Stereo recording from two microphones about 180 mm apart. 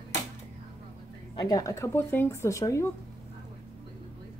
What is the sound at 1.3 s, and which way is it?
Speech, 20° left (ahead or behind).